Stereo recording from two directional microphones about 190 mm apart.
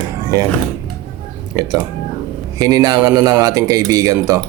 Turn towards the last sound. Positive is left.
turn(degrees=-15)  # may be behind; listen again after turning